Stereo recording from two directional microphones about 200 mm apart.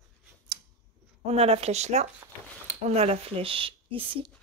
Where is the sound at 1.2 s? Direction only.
30° right (ahead or behind).